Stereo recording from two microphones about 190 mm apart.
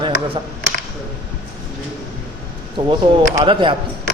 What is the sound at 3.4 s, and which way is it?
Speech, 25° right (ahead or behind).